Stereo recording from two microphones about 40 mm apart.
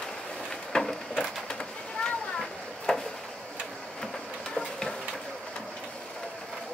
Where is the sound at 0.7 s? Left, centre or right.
Left.